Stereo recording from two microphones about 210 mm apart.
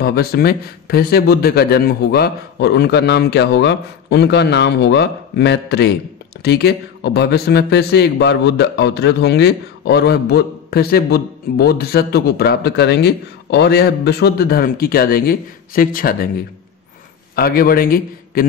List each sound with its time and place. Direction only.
0.0 s a man's voice: 50° left (ahead or behind)